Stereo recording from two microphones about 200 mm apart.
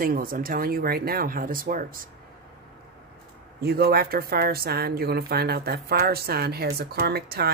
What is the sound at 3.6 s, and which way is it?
A woman's voice, 50° right (ahead or behind).